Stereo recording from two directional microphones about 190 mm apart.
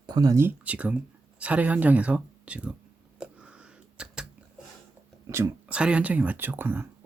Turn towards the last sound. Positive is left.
turn(degrees=-10)  # may be behind; listen again after turning